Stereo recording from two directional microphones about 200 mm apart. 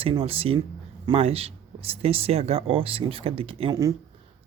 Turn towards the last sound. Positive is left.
turn(degrees=-20)  # may be behind; listen again after turning